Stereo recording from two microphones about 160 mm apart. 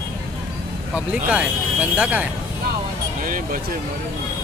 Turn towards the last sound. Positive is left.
turn(degrees=-60)  # may be behind; listen again after turning